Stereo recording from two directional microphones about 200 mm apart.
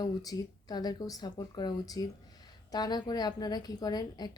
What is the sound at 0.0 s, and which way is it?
A woman's voice, 20° left (ahead or behind).